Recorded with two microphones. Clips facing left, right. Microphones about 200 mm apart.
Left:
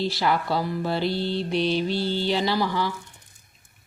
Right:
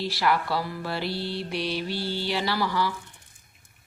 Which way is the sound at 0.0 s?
25° left (ahead or behind).